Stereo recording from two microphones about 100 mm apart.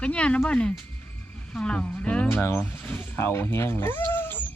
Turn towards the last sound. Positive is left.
turn(degrees=20)  # may be behind; listen again after turning